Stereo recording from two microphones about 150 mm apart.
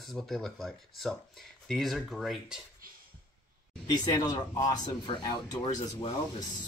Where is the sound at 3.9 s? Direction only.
25° left (ahead or behind).